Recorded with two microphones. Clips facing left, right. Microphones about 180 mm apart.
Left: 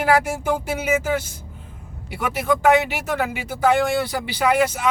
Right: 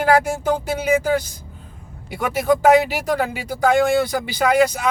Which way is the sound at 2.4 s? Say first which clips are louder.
Right 3 dB; 40° right (ahead or behind).